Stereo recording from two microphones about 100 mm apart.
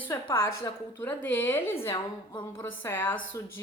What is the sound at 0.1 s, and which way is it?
Speech, 50° left (ahead or behind).